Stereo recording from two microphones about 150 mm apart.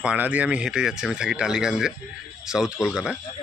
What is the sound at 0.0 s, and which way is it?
Speech, 10° right (ahead or behind).